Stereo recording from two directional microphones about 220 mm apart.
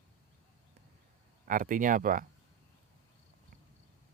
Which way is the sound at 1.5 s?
40° right (ahead or behind).